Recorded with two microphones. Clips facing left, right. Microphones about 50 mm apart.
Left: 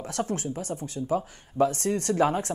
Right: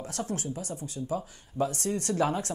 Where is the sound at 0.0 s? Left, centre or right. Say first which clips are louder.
Left 4 dB; left.